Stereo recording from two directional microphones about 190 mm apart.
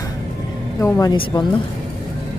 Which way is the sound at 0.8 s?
20° left (ahead or behind).